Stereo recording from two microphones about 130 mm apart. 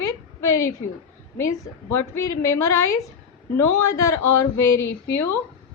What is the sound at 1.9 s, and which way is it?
A woman's voice, 20° left (ahead or behind).